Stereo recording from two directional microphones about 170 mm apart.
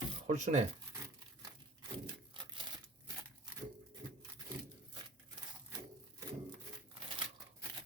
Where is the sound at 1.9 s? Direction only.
30° right (ahead or behind).